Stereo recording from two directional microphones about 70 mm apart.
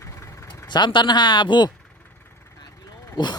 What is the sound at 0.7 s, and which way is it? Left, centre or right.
Speech, left.